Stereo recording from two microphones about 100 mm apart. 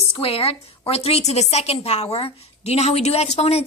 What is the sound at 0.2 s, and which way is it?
A woman's voice, 70° left (ahead or behind).